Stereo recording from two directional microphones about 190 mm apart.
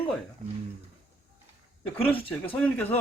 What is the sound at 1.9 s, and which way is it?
Speech, 30° left (ahead or behind).